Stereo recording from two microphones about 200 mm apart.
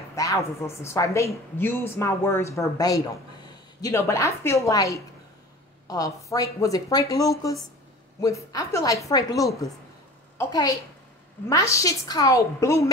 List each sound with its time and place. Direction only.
0.1 s a woman's voice: 15° left (ahead or behind)